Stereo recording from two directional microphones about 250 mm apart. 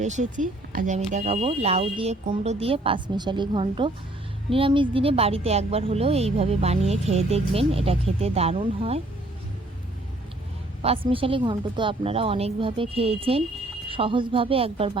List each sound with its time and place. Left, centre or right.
0.0 s speech: right
10.8 s speech: right